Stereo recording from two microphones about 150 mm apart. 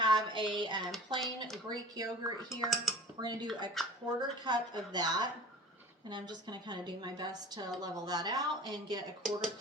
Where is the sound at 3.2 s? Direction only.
30° right (ahead or behind).